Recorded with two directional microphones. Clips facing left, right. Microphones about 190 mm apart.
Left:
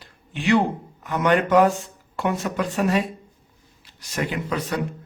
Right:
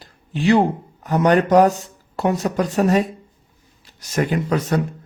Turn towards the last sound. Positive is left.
turn(degrees=-45)  # may be behind; listen again after turning